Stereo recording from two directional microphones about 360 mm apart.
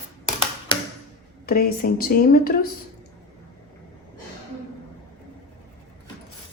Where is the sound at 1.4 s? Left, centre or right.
Left.